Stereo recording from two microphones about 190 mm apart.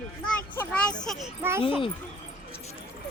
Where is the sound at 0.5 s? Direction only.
10° left (ahead or behind).